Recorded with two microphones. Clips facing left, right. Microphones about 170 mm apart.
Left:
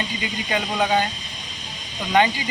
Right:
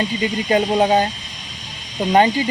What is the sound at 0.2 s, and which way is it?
Speech, 35° right (ahead or behind).